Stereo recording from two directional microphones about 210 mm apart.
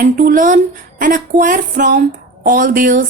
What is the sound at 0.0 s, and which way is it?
A woman's voice, 40° right (ahead or behind).